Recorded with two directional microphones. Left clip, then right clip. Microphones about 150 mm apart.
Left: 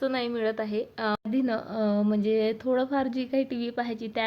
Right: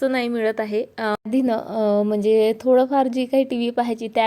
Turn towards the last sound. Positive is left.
turn(degrees=-50)  # may be behind; listen again after turning